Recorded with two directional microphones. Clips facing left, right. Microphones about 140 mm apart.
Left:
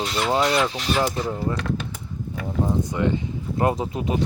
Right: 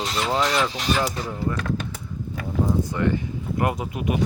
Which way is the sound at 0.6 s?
25° left (ahead or behind).